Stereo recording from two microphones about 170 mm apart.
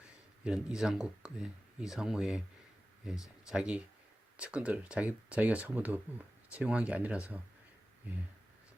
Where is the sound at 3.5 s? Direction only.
5° right (ahead or behind).